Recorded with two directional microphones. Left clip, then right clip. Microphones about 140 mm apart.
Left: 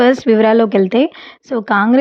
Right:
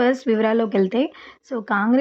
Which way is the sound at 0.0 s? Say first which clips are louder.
Left 8 dB; 30° left (ahead or behind).